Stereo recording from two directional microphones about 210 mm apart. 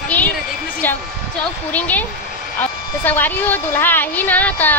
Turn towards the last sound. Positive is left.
turn(degrees=10)  # may be behind; listen again after turning